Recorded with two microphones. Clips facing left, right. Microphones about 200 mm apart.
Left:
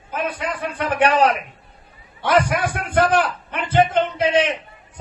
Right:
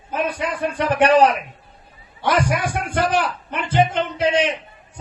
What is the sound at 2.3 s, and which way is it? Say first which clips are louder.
A man's voice: left 2 dB; 55° left (ahead or behind).